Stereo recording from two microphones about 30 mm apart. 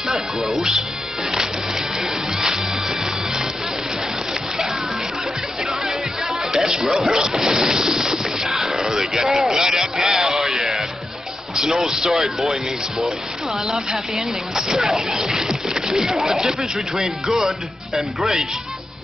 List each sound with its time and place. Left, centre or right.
2.0 s music: centre
6.5 s music: centre
8.9 s a sound: centre
11.5 s speech: centre
13.7 s speech: centre